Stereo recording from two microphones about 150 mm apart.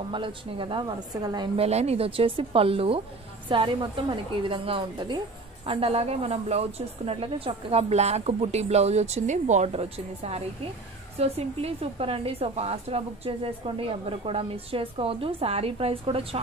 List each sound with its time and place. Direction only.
0.1 s a woman's voice: 35° right (ahead or behind)
1.6 s a woman's voice: 45° right (ahead or behind)